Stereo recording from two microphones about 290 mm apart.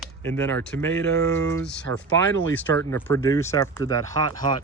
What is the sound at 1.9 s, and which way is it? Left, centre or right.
Speech, right.